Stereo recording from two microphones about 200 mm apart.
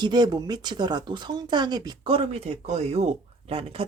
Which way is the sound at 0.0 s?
20° right (ahead or behind).